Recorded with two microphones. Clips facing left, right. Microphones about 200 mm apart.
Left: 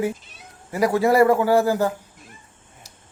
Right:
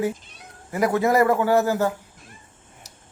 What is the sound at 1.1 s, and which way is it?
Speech, 10° left (ahead or behind).